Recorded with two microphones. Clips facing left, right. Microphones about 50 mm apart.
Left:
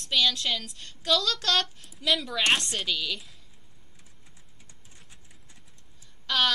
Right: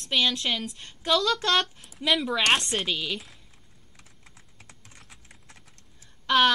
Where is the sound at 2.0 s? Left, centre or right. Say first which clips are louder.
Right 2 dB; right.